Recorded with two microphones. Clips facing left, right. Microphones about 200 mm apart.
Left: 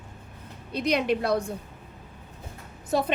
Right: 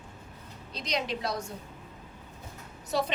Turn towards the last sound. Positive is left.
turn(degrees=50)  # may be behind; listen again after turning